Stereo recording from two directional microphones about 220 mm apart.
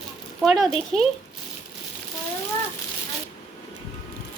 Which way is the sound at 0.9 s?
30° left (ahead or behind).